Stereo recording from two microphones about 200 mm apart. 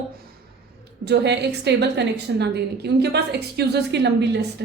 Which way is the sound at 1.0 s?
55° right (ahead or behind).